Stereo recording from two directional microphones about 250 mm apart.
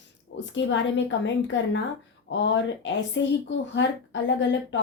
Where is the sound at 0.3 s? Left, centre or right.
Left.